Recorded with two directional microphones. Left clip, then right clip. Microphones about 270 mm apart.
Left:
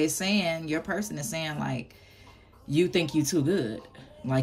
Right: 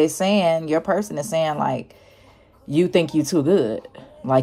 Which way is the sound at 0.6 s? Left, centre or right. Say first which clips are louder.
Right 10 dB; centre.